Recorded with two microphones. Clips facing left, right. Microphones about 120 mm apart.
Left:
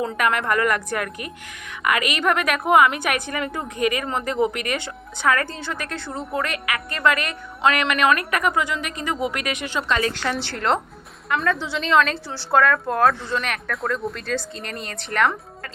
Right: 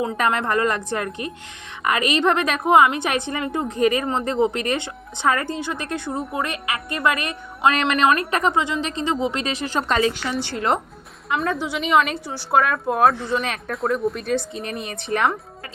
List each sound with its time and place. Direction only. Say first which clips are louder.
0.2 s a woman's voice: even; 30° right (ahead or behind)
10.4 s a woman's voice: right 2 dB; 15° right (ahead or behind)
11.3 s a woman's voice: even; 5° right (ahead or behind); by 15.3 s 20° right (ahead or behind)